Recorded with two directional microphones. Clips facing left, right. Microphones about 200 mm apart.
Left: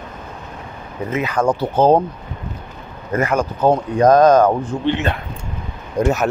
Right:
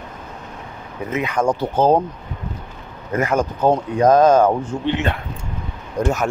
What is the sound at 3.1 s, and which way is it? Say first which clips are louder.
Speech: left 1 dB; 20° right (ahead or behind).